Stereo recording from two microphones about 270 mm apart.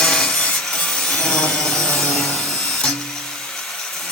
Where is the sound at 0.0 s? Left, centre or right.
Centre.